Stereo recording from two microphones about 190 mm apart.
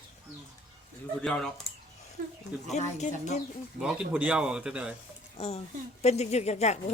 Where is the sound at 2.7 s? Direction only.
35° left (ahead or behind).